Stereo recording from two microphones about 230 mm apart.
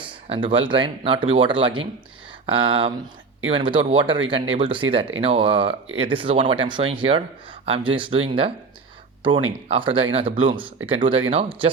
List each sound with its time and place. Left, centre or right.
0.0 s speech: right
9.6 s speech: right